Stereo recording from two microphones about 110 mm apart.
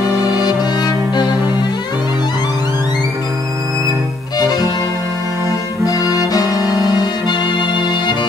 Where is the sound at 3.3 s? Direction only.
30° right (ahead or behind).